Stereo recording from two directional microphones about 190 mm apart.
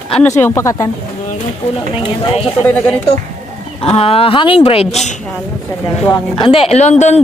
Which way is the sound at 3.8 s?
30° left (ahead or behind).